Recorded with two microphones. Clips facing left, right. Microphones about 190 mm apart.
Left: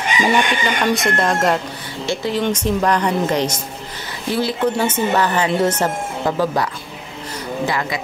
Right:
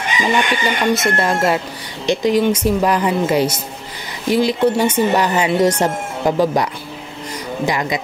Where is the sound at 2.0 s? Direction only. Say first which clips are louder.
Right 5 dB; 15° right (ahead or behind).